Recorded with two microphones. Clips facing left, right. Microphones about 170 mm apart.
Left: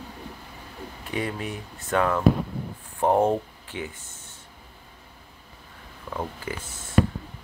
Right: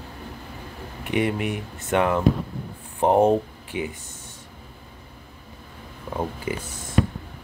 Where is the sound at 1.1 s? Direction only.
15° right (ahead or behind).